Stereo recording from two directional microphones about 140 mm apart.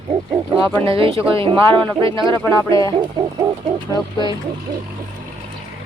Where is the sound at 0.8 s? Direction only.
40° right (ahead or behind).